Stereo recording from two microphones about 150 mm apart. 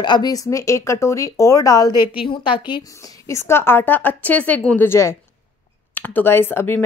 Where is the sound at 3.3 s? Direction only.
15° left (ahead or behind).